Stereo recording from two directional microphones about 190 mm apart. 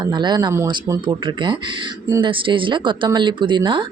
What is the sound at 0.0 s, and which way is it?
Speech, 25° right (ahead or behind).